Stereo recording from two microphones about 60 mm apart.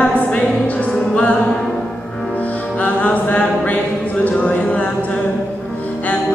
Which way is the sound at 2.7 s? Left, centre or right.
Left.